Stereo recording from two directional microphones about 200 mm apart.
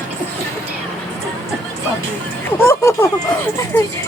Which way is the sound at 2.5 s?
10° left (ahead or behind).